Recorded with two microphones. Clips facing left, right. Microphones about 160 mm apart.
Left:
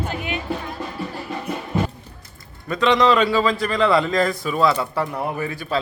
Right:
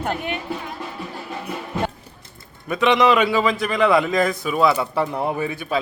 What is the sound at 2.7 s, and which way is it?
A man's voice, 15° right (ahead or behind).